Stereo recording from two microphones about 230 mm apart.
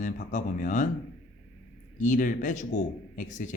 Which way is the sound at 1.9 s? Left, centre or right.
Left.